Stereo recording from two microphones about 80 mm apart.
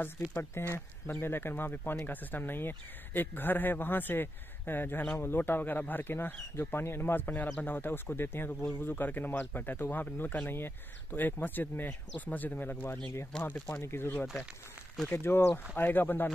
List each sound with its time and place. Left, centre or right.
0.4 s speech: left
13.3 s speech: centre
13.8 s speech: left